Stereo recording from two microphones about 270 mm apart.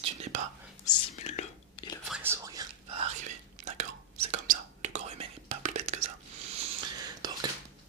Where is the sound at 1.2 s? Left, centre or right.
Left.